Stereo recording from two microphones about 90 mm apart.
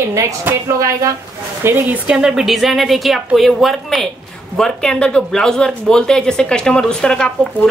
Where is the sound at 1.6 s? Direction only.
20° right (ahead or behind).